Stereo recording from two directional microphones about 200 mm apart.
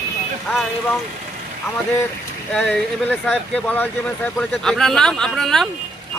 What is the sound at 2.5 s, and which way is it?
Speech, 5° left (ahead or behind).